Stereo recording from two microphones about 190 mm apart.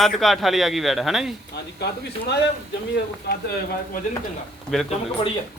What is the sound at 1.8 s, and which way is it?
A man's voice, 60° left (ahead or behind).